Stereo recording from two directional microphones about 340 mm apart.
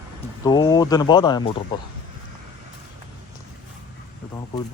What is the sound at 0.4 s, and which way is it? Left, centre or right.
A man's voice, centre.